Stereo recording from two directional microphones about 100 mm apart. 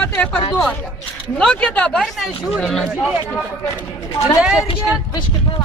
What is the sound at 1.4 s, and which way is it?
Speech, 15° left (ahead or behind).